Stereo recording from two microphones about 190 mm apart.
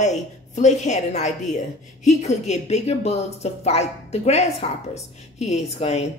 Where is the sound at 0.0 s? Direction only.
40° left (ahead or behind).